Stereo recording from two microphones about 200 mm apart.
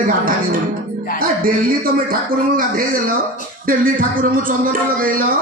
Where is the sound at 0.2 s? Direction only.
45° right (ahead or behind).